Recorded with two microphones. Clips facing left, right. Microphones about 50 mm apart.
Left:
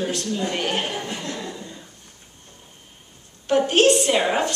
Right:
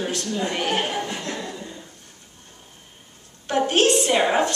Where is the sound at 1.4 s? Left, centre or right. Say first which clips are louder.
Even; centre.